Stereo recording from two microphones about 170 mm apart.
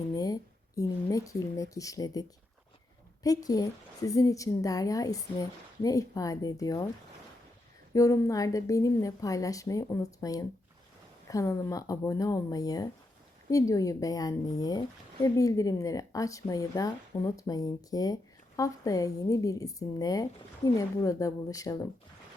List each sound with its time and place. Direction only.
0.1 s a sound: 20° left (ahead or behind)
0.8 s a woman's voice: 20° left (ahead or behind)
3.2 s a woman's voice: 20° left (ahead or behind)
7.9 s a woman's voice: 20° left (ahead or behind)